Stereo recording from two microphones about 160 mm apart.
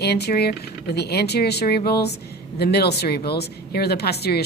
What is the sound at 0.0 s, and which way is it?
Speech, 90° left.